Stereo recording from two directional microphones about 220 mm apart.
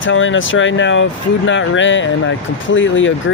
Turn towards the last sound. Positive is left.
turn(degrees=60)  # may be behind; listen again after turning